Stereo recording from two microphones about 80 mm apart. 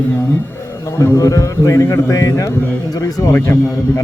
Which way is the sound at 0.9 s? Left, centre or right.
Left.